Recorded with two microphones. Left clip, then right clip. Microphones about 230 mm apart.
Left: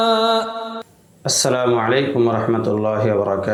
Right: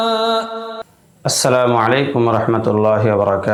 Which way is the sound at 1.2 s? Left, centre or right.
Right.